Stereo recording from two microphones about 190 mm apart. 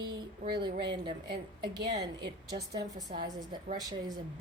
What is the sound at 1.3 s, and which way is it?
A woman's voice, 20° right (ahead or behind).